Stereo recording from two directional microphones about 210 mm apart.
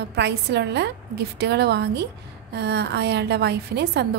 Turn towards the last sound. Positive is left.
turn(degrees=-50)  # may be behind; listen again after turning